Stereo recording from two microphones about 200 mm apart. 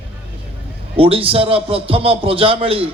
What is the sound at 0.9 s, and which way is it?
A man's voice, 25° right (ahead or behind).